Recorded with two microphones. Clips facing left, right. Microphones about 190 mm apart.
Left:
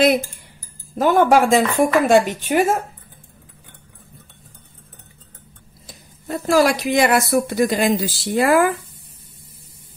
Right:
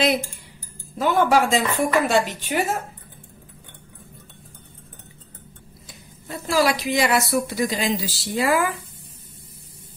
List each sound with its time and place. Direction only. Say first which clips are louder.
0.9 s speech: left 4 dB; 50° left (ahead or behind)
5.9 s speech: left 8 dB; 45° left (ahead or behind)